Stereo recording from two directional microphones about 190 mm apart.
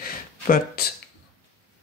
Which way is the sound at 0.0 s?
50° left (ahead or behind).